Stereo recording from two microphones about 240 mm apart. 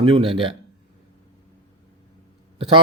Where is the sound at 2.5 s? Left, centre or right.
Right.